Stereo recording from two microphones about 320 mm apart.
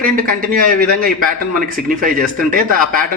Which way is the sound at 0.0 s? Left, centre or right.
Right.